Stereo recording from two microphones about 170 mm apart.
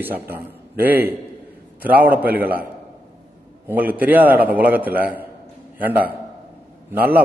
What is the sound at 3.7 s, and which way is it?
A man's voice, 10° right (ahead or behind).